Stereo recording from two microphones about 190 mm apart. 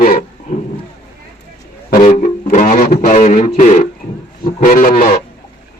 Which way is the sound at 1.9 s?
40° left (ahead or behind).